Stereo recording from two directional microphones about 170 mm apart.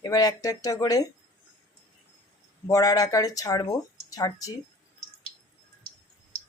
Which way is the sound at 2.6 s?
20° left (ahead or behind).